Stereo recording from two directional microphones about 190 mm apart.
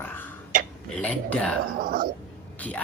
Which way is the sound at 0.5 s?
45° right (ahead or behind).